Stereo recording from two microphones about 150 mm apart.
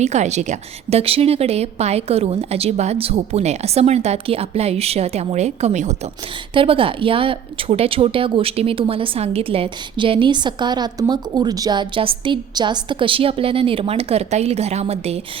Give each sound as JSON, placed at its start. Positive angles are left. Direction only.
{"t": 0.0, "sound": "a woman's voice", "side_deg": -50}
{"t": 6.5, "sound": "speech", "side_deg": -35}